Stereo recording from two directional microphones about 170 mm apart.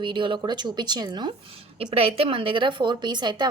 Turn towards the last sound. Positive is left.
turn(degrees=-25)  # may be behind; listen again after turning